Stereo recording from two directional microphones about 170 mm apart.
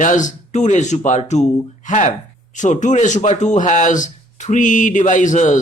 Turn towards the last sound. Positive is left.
turn(degrees=45)  # may be behind; listen again after turning